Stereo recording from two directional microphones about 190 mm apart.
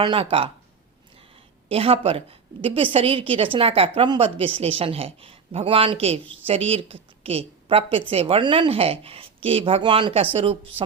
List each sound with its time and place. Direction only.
0.0 s a woman's voice: 25° right (ahead or behind)
1.7 s a woman's voice: 30° right (ahead or behind)